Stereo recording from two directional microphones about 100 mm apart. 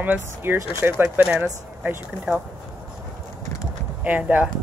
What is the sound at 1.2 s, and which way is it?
Speech, 10° right (ahead or behind).